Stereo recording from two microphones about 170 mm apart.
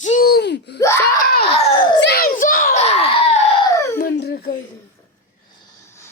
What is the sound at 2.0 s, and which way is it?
Speech, 70° left (ahead or behind).